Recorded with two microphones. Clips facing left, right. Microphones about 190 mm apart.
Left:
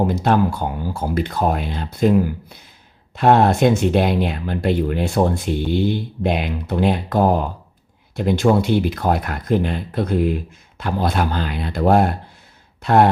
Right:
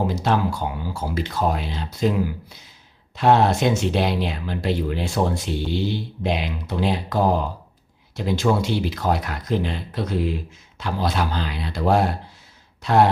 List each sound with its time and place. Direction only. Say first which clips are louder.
0.1 s speech: left 4 dB; 55° left (ahead or behind)
12.8 s gasp: left 3 dB; 55° left (ahead or behind)